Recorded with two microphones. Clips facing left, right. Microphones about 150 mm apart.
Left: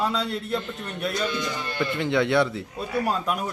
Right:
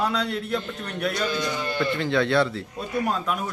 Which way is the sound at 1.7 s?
20° left (ahead or behind).